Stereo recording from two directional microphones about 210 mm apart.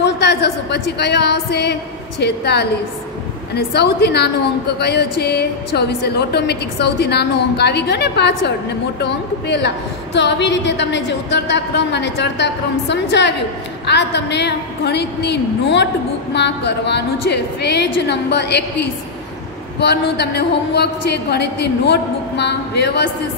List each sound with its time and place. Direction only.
0.0 s a woman's voice: 55° left (ahead or behind)